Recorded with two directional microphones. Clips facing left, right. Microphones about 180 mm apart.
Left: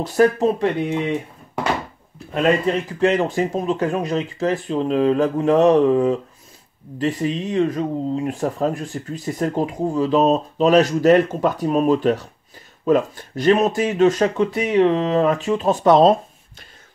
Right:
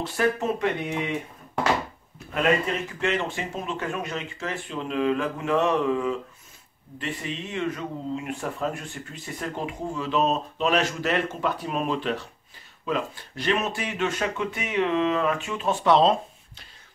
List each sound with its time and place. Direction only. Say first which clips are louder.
0.0 s speech: left 9 dB; 40° left (ahead or behind)
2.7 s speech: left 8 dB; 30° left (ahead or behind)